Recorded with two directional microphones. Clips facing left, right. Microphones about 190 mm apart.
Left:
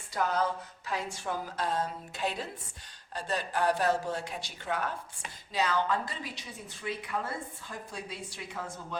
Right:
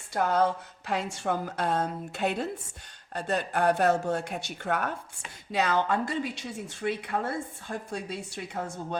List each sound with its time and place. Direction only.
0.1 s a woman's voice: 55° right (ahead or behind)